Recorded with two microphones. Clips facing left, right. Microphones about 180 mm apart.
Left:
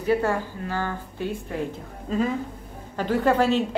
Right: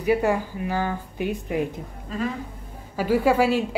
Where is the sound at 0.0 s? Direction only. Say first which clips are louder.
Right 2 dB; 15° right (ahead or behind).